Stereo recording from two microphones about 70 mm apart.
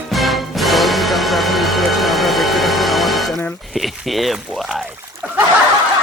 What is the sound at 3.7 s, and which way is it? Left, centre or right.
Speech, centre.